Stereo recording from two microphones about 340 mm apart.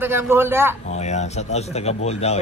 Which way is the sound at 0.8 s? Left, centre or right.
Centre.